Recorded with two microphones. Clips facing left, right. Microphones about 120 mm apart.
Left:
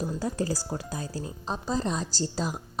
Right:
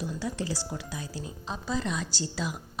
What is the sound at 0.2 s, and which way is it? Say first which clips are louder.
Speech: left 3 dB; 40° left (ahead or behind).